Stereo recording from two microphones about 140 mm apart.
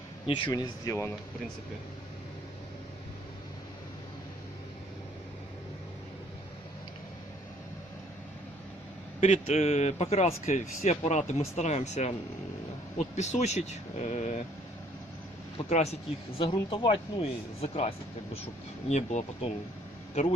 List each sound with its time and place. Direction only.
0.3 s speech: 40° left (ahead or behind)
0.5 s speech: 25° left (ahead or behind)
9.2 s speech: 50° left (ahead or behind)
13.1 s speech: 55° left (ahead or behind)
15.7 s speech: 50° left (ahead or behind)
16.4 s speech: 35° left (ahead or behind)
18.9 s speech: 55° left (ahead or behind)